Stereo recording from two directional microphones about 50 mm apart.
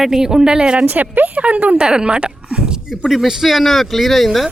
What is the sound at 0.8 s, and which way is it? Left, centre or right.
Speech, right.